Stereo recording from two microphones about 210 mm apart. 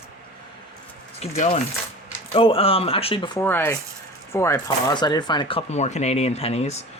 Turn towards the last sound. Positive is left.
turn(degrees=30)  # may be behind; listen again after turning